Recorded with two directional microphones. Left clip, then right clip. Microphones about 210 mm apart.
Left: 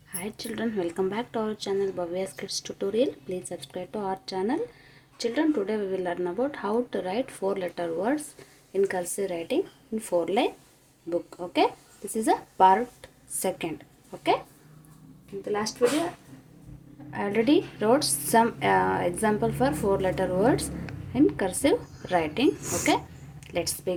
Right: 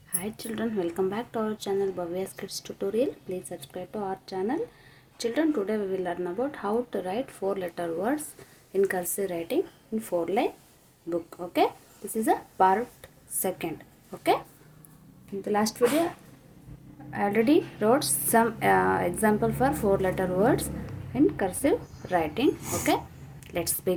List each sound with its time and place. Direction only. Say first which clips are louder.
0.1 s speech: even; 5° right (ahead or behind)
15.4 s speech: right 2 dB; 25° right (ahead or behind)
17.1 s a woman's voice: even; 10° right (ahead or behind)